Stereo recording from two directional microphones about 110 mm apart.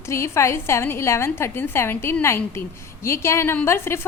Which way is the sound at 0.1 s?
25° left (ahead or behind).